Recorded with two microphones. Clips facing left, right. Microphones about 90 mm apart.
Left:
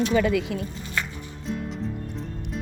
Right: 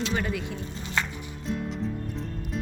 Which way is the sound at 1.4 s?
Centre (ahead or behind).